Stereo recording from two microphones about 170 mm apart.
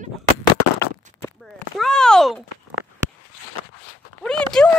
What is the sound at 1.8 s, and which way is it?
Speech, 5° left (ahead or behind).